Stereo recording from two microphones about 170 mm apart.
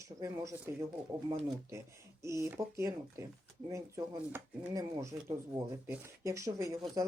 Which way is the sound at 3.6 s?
15° right (ahead or behind).